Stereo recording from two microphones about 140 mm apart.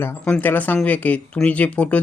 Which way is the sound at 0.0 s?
15° left (ahead or behind).